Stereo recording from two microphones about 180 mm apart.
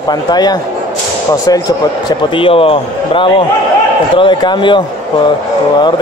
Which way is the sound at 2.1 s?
30° left (ahead or behind).